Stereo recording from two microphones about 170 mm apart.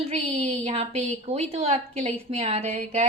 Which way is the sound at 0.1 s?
35° right (ahead or behind).